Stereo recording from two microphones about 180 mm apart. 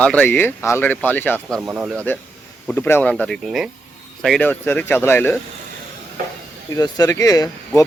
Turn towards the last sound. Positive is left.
turn(degrees=20)  # may be behind; listen again after turning